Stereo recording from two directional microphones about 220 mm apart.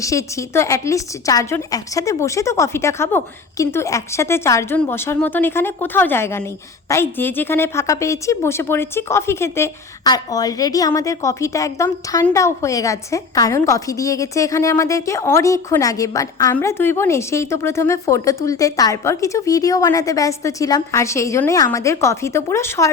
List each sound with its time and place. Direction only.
0.0 s a woman's voice: 15° left (ahead or behind)